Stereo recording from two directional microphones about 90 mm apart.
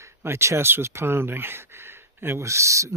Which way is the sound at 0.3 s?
30° right (ahead or behind).